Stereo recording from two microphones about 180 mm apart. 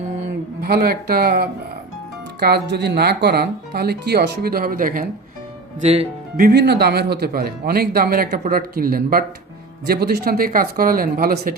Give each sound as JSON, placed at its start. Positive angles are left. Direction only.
{"t": 0.6, "sound": "speech", "side_deg": -60}
{"t": 2.4, "sound": "speech", "side_deg": -65}
{"t": 5.8, "sound": "speech", "side_deg": -35}
{"t": 6.3, "sound": "speech", "side_deg": -60}